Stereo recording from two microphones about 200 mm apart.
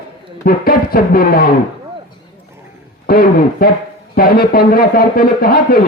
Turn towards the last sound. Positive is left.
turn(degrees=45)  # may be behind; listen again after turning